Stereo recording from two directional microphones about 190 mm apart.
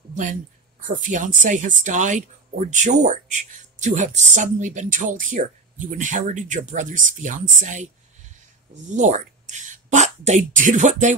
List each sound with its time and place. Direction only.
0.1 s speech: 45° right (ahead or behind)